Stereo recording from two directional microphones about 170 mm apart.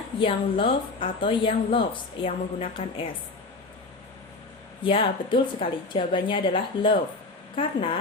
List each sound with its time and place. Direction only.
0.2 s a woman's voice: 30° left (ahead or behind)
4.8 s a woman's voice: 30° left (ahead or behind)